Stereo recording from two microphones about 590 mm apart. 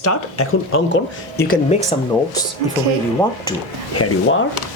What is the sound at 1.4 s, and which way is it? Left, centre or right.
Speech, centre.